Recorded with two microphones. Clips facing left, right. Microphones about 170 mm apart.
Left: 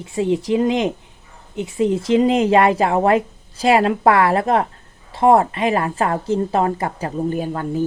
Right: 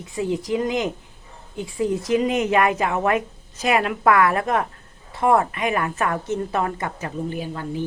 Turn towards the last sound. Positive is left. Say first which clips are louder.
# left 6 dB
turn(degrees=45)  # may be behind; listen again after turning